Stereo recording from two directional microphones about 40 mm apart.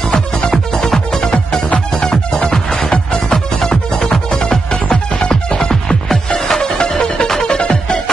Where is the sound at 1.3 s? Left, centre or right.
Left.